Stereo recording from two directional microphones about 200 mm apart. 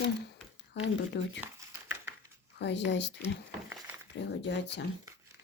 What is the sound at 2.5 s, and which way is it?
Speech, 60° left (ahead or behind).